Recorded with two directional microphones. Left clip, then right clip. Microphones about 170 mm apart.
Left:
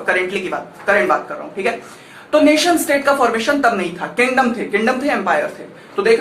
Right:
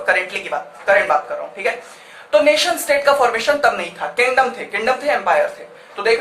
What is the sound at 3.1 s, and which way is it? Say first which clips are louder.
Speech: even; 25° right (ahead or behind).